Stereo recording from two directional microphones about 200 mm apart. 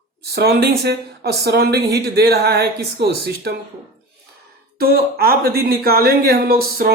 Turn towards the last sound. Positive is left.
turn(degrees=-50)  # may be behind; listen again after turning